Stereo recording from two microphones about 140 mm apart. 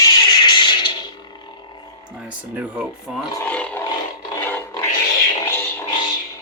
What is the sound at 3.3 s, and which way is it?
Speech, 10° left (ahead or behind).